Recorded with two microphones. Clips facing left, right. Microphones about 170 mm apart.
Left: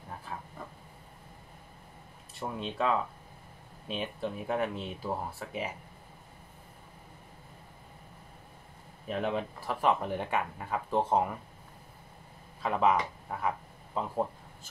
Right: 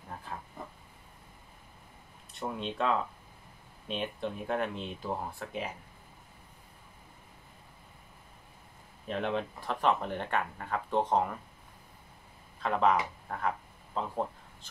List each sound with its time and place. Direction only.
0.6 s a sound: 20° right (ahead or behind)
2.4 s speech: 5° left (ahead or behind)
9.0 s speech: 5° left (ahead or behind)
12.5 s speech: 10° left (ahead or behind)